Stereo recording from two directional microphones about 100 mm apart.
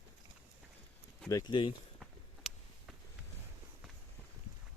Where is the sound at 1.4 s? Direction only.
50° left (ahead or behind).